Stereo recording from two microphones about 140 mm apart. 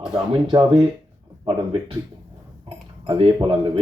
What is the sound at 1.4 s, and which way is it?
Speech, 40° right (ahead or behind).